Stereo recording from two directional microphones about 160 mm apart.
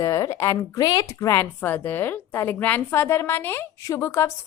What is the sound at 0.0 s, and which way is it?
Speech, 20° left (ahead or behind).